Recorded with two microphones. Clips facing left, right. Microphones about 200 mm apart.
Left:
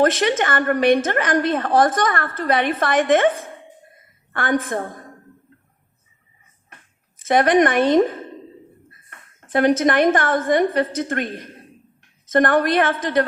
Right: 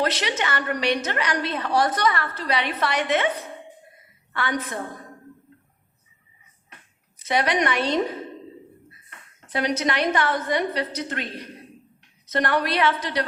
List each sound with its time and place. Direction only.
0.0 s a woman's voice: 50° left (ahead or behind)
7.2 s a woman's voice: 50° left (ahead or behind)